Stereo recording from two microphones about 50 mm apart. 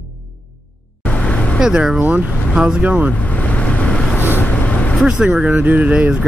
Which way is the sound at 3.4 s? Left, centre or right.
Left.